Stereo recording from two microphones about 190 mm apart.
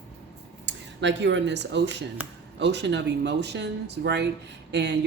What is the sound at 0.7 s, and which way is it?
Speech, 70° right (ahead or behind).